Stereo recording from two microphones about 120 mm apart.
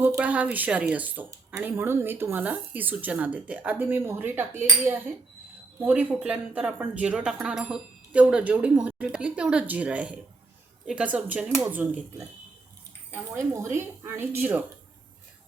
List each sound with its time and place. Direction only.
0.0 s speech: 10° right (ahead or behind)